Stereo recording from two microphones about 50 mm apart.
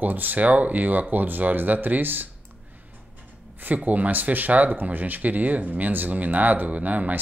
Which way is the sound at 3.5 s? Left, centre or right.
Right.